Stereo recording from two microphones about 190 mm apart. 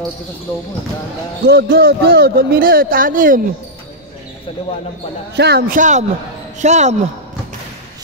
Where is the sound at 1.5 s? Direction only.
55° right (ahead or behind).